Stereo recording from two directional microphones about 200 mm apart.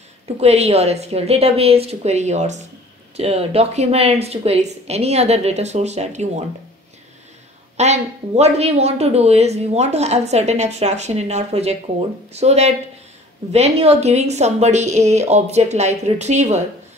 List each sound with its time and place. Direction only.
0.4 s speech: 30° right (ahead or behind)
7.7 s speech: 35° right (ahead or behind)